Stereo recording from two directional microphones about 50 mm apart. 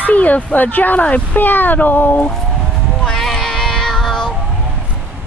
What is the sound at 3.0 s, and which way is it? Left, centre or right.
Child singing, centre.